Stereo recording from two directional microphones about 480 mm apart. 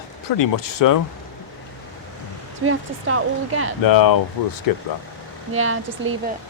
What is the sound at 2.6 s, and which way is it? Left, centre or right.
Speech, right.